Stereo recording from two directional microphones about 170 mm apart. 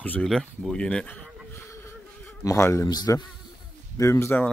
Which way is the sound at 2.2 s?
15° left (ahead or behind).